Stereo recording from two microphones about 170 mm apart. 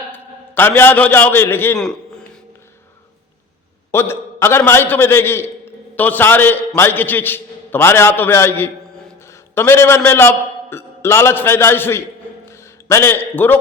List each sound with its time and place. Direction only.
0.1 s a man's voice: 10° left (ahead or behind)
3.9 s a man's voice: 15° left (ahead or behind)
12.5 s a sound: 15° left (ahead or behind)
13.3 s a man's voice: 10° left (ahead or behind)